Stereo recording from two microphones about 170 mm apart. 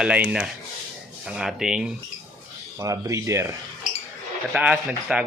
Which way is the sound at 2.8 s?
20° right (ahead or behind).